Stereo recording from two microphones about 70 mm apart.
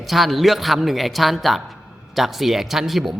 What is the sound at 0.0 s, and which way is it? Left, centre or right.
A woman's voice, centre.